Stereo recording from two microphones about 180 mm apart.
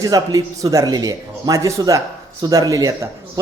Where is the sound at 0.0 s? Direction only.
20° right (ahead or behind).